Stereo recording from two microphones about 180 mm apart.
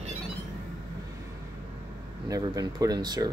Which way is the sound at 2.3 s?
20° right (ahead or behind).